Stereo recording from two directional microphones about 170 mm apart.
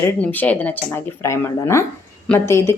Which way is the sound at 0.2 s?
10° left (ahead or behind).